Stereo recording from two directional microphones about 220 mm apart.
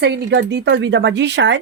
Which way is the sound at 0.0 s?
50° right (ahead or behind).